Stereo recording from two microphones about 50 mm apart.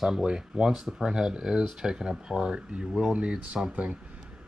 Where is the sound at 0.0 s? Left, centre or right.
Centre.